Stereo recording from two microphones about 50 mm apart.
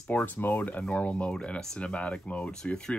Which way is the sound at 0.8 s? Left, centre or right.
Centre.